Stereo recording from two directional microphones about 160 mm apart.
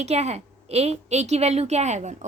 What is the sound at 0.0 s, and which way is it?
Speech, 45° right (ahead or behind).